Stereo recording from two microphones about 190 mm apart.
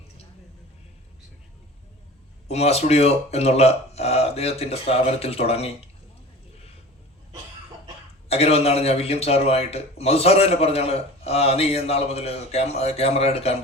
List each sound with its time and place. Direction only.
2.5 s a man's voice: 35° left (ahead or behind)
8.3 s a man's voice: 35° left (ahead or behind)